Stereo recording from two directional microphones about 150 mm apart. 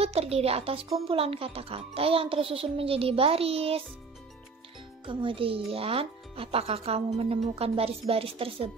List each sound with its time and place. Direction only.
0.0 s speech: 45° right (ahead or behind)
5.0 s speech: 35° right (ahead or behind)